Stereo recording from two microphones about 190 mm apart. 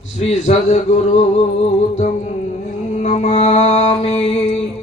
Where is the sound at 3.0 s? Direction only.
35° left (ahead or behind).